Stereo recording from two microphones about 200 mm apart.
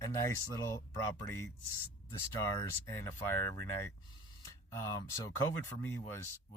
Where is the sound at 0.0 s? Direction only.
15° left (ahead or behind).